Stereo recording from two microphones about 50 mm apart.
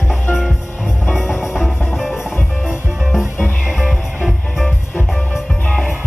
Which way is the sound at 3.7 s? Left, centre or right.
Centre.